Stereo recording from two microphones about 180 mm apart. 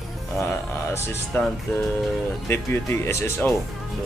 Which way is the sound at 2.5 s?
15° left (ahead or behind).